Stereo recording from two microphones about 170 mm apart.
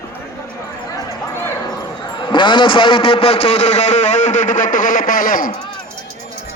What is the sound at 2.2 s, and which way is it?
A man's voice, 30° left (ahead or behind).